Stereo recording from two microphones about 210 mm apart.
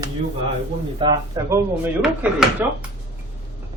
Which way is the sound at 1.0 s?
15° right (ahead or behind).